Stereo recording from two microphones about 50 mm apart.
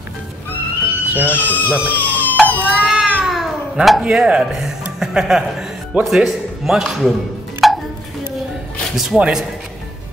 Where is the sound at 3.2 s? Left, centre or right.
Centre.